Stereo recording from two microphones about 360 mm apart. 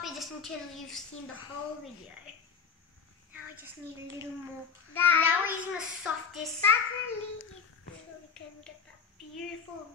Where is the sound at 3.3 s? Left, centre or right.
Centre.